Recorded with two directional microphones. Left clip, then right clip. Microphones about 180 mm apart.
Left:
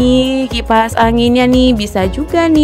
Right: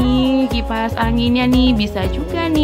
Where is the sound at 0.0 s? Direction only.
45° left (ahead or behind).